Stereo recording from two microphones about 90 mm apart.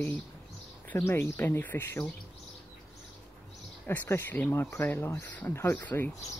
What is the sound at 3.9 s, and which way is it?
Speech, 20° left (ahead or behind).